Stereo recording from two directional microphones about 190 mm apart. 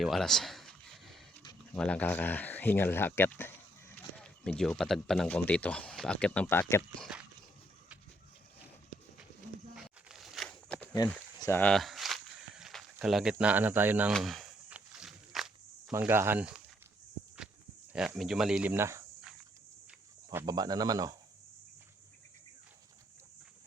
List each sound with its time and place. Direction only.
0.0 s a sound: centre (ahead or behind)
1.7 s speech: 5° left (ahead or behind)
7.1 s speech: 5° right (ahead or behind)
9.7 s a sound: centre (ahead or behind)
11.3 s walk: 15° left (ahead or behind)
15.9 s speech: 10° right (ahead or behind)
17.9 s speech: 5° right (ahead or behind)
20.4 s speech: 20° right (ahead or behind)